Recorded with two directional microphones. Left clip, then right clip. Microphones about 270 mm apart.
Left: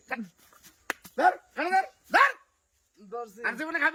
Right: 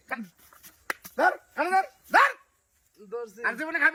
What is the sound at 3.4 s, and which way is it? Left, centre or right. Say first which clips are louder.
Speech: right 2 dB; centre.